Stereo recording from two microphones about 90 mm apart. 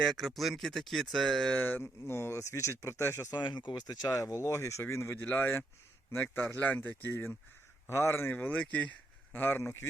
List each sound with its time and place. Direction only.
0.0 s speech: 5° left (ahead or behind)
1.5 s speech: 20° left (ahead or behind)
3.3 s speech: 55° left (ahead or behind); by 9.8 s 25° left (ahead or behind)